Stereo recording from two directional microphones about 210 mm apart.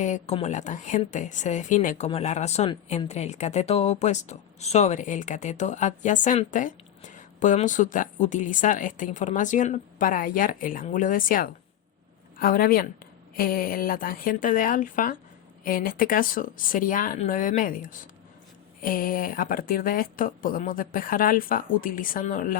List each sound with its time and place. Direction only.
0.0 s speech: 30° left (ahead or behind)